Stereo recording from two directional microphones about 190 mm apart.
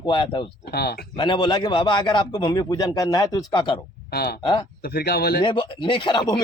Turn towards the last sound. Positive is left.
turn(degrees=25)  # may be behind; listen again after turning